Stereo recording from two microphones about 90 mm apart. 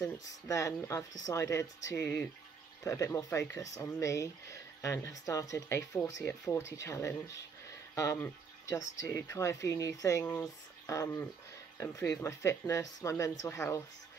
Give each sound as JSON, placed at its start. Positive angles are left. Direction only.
{"t": 0.0, "sound": "speech", "side_deg": 35}